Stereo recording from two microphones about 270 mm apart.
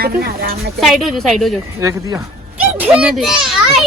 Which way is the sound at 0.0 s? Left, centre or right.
Right.